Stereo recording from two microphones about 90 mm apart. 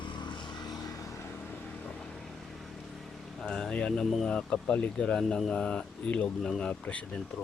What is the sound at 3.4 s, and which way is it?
Speech, 5° left (ahead or behind).